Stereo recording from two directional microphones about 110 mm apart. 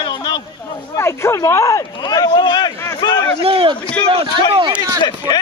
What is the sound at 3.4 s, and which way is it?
Speech, 60° right (ahead or behind).